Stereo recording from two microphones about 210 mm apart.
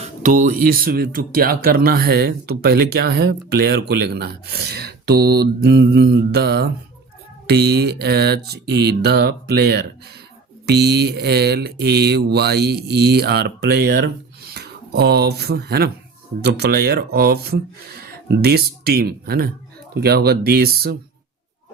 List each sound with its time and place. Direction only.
0.0 s speech: 35° right (ahead or behind)